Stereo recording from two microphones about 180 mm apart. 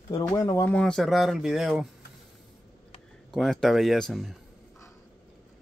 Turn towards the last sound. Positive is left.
turn(degrees=0)  # may be behind; listen again after turning